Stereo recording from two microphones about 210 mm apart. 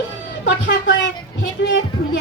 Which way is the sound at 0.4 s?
60° left (ahead or behind).